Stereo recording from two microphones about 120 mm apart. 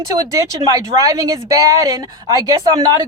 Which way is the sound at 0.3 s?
30° right (ahead or behind).